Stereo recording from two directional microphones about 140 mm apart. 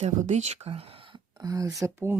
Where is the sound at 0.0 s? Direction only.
55° right (ahead or behind).